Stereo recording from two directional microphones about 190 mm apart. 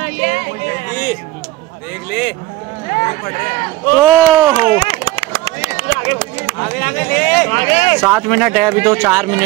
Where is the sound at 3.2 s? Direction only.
40° left (ahead or behind).